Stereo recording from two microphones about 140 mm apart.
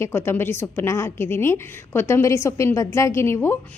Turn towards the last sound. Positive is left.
turn(degrees=20)  # may be behind; listen again after turning